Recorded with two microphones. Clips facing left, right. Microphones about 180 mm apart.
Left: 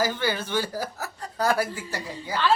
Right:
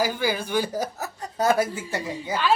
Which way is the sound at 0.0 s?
10° right (ahead or behind).